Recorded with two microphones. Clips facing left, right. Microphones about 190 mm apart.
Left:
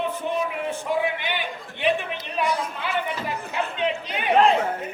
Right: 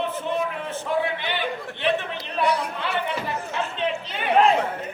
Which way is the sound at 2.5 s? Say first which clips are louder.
Right 2 dB; 65° right (ahead or behind).